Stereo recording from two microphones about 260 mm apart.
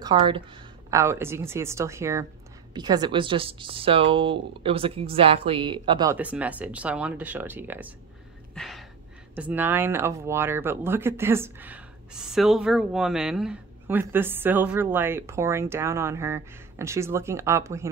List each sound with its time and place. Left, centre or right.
0.0 s speech: centre
8.5 s a sound: centre
9.3 s speech: centre